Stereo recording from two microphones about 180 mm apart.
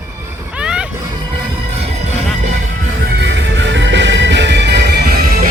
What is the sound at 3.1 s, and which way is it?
Music, 75° right (ahead or behind).